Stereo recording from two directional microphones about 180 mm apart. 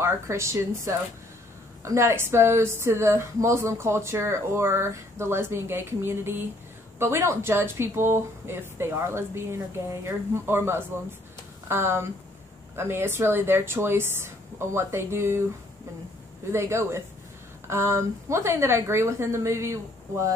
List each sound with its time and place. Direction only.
0.0 s speech: 15° right (ahead or behind)
16.5 s speech: 15° right (ahead or behind)